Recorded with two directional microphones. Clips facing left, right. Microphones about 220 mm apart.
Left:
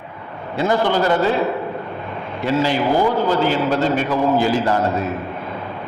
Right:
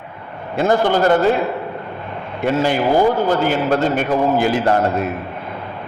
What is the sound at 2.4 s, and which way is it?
A man's voice, 50° right (ahead or behind).